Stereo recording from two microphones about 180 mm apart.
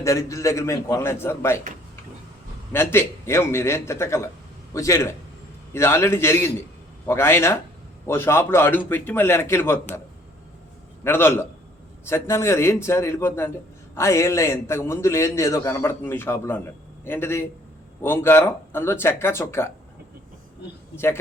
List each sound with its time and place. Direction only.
0.0 s a man's voice: 15° left (ahead or behind)
2.7 s a man's voice: 15° left (ahead or behind)
11.0 s a man's voice: 10° left (ahead or behind)
20.9 s a man's voice: 15° left (ahead or behind)